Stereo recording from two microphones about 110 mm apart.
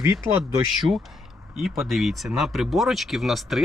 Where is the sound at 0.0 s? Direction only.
25° right (ahead or behind).